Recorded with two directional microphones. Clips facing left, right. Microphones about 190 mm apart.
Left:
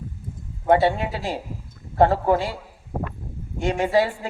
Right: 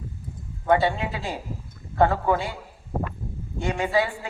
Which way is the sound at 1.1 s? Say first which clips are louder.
Left 3 dB; 40° left (ahead or behind).